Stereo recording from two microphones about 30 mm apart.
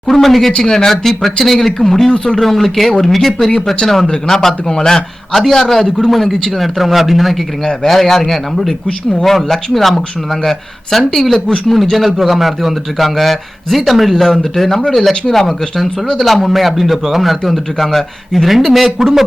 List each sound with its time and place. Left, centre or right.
0.1 s a man's voice: centre
5.3 s a man's voice: centre
7.9 s a man's voice: centre